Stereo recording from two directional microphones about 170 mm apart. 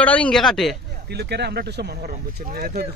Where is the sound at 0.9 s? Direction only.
75° right (ahead or behind).